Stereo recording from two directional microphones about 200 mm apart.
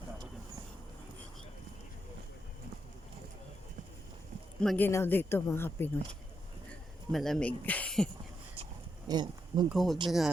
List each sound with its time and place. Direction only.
4.6 s speech: centre (ahead or behind)
7.1 s speech: centre (ahead or behind)
9.0 s a sound: 20° right (ahead or behind)
9.6 s speech: centre (ahead or behind)